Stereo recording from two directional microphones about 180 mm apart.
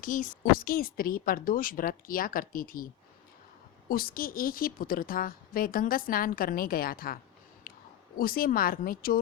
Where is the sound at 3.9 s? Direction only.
55° left (ahead or behind).